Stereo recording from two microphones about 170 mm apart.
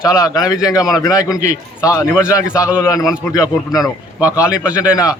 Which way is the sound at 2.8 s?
20° left (ahead or behind).